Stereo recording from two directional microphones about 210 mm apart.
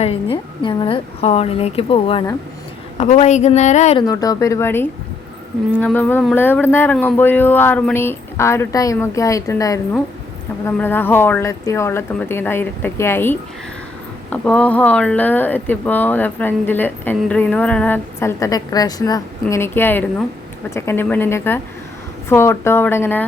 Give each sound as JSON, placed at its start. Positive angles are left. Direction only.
{"t": 0.0, "sound": "a woman's voice", "side_deg": 25}
{"t": 3.9, "sound": "speech", "side_deg": 20}